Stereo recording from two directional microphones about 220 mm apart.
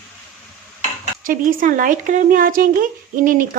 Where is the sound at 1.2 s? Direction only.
40° right (ahead or behind).